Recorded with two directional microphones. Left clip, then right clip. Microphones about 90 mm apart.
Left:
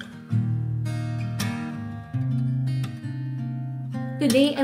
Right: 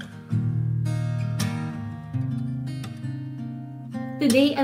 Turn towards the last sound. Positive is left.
turn(degrees=20)  # may be behind; listen again after turning